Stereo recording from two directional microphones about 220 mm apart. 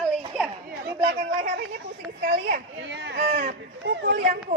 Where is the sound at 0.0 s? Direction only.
Centre (ahead or behind).